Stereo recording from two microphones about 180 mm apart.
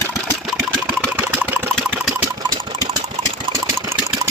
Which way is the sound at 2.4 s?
20° right (ahead or behind).